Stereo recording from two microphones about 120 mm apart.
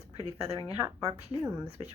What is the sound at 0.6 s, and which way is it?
Speech, 15° right (ahead or behind).